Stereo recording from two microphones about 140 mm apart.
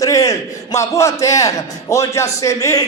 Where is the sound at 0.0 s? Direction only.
25° left (ahead or behind).